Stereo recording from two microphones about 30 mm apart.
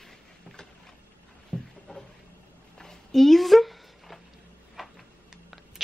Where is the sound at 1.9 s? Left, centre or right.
Left.